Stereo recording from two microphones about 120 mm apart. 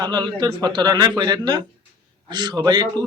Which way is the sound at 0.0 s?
35° right (ahead or behind).